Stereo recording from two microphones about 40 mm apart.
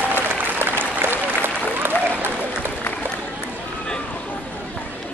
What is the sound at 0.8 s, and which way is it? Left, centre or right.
Applause, right.